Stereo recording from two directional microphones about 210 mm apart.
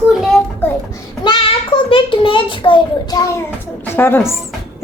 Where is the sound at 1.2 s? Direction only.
20° left (ahead or behind).